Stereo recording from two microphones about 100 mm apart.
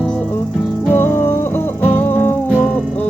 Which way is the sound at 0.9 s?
20° left (ahead or behind).